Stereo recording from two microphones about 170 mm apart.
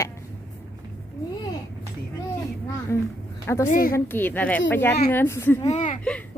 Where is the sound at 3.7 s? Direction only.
55° left (ahead or behind).